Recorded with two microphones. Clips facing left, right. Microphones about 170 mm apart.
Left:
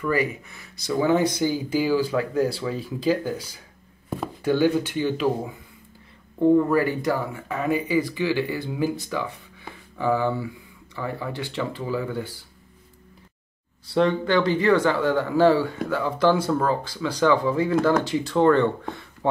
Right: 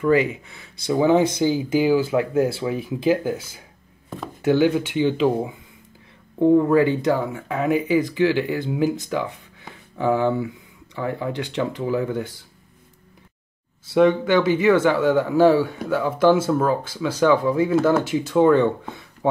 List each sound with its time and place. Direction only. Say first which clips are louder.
0.0 s speech: right 5 dB; 25° right (ahead or behind)
4.5 s speech: right 3 dB; 15° right (ahead or behind)
13.9 s speech: right 4 dB; 15° right (ahead or behind)